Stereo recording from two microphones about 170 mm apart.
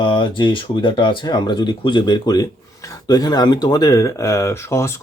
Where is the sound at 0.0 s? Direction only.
25° left (ahead or behind).